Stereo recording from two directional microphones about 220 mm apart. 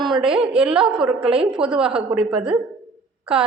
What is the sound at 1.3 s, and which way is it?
Speech, 25° right (ahead or behind).